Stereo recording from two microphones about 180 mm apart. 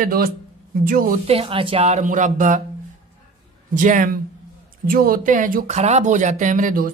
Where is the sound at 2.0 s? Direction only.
45° right (ahead or behind).